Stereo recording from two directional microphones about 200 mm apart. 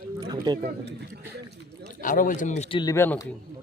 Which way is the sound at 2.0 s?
40° left (ahead or behind).